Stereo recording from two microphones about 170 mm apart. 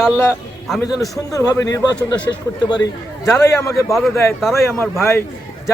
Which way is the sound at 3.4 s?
20° left (ahead or behind).